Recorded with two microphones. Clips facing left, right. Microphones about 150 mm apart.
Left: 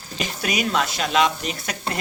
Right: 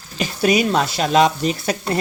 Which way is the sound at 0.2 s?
35° right (ahead or behind).